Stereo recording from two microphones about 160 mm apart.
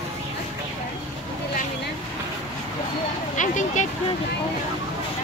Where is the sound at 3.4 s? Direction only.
50° left (ahead or behind).